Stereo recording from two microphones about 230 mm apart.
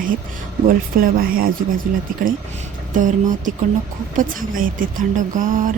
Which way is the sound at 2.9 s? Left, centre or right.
Right.